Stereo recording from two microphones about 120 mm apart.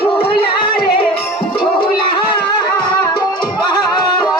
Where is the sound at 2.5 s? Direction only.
35° left (ahead or behind).